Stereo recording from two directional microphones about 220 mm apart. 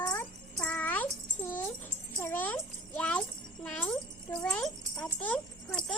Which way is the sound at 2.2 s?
10° left (ahead or behind).